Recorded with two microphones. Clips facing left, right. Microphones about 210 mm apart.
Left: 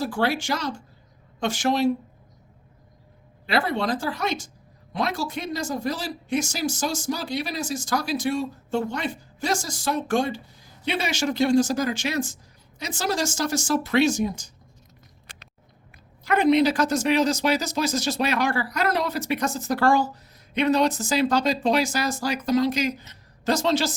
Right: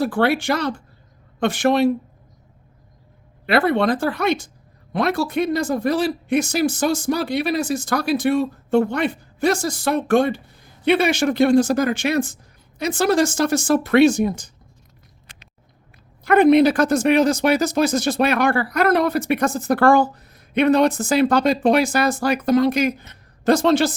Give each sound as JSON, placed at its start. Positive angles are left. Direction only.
{"t": 0.0, "sound": "speech", "side_deg": -60}
{"t": 3.4, "sound": "speech", "side_deg": -60}
{"t": 16.2, "sound": "speech", "side_deg": -55}